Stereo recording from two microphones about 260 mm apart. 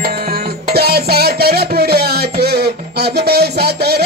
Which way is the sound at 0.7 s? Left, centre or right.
Right.